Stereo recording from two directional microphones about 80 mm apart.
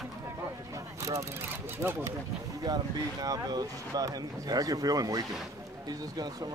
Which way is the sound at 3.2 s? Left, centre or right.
Right.